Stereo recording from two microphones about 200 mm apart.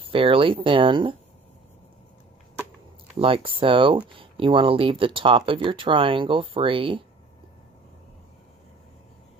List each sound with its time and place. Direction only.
0.0 s speech: 25° right (ahead or behind)
3.2 s speech: 25° right (ahead or behind)